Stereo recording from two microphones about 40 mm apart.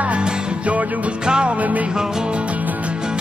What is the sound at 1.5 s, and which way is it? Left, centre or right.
Music, right.